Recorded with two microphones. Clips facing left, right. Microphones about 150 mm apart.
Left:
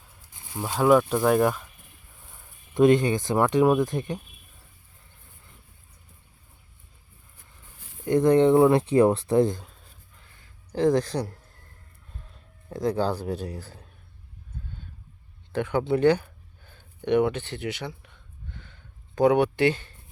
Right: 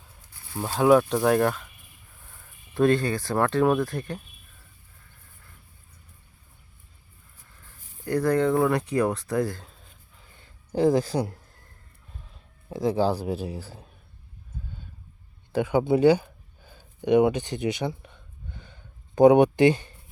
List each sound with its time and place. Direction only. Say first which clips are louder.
0.3 s a sound: right 1 dB; 15° left (ahead or behind)
0.8 s speech: right 1 dB; centre (ahead or behind)
2.7 s speech: left 3 dB; 15° left (ahead or behind)
8.0 s speech: left 4 dB; 20° left (ahead or behind)
10.8 s speech: right 1 dB; 5° right (ahead or behind)
12.6 s speech: right 2 dB; 5° right (ahead or behind)
15.5 s a sound: right 3 dB; 10° right (ahead or behind)